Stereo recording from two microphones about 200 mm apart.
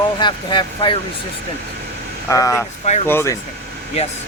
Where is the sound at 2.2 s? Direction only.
15° left (ahead or behind).